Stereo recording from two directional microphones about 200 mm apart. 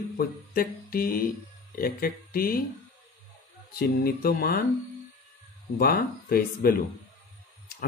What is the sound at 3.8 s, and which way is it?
Speech, 50° left (ahead or behind).